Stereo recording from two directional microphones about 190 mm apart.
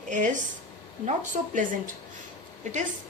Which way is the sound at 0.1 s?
40° right (ahead or behind).